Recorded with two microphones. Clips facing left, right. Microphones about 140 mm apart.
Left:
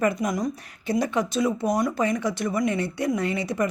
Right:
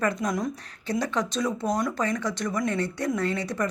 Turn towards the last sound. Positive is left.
turn(degrees=10)  # may be behind; listen again after turning